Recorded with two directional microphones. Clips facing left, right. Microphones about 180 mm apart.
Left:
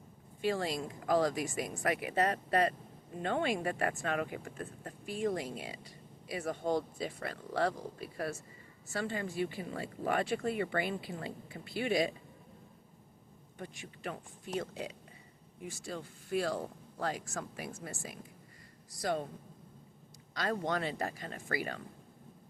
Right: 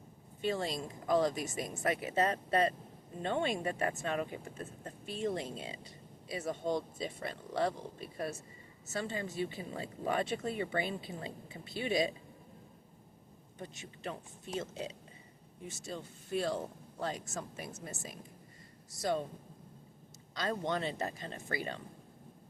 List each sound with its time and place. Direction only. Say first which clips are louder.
0.4 s speech: left 1 dB; 25° right (ahead or behind)
13.6 s speech: left 1 dB; 25° right (ahead or behind)
20.3 s speech: left 1 dB; 25° right (ahead or behind)